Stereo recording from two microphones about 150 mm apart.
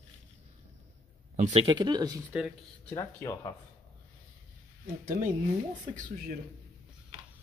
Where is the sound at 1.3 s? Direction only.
45° right (ahead or behind).